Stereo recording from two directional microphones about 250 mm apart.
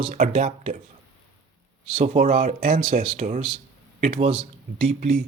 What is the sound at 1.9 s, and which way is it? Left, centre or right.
Speech, right.